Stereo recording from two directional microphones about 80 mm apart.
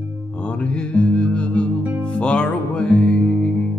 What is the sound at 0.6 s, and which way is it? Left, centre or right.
Music, centre.